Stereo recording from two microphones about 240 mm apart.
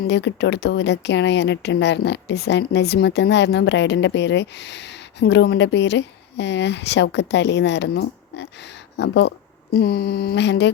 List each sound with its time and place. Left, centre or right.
0.1 s speech: left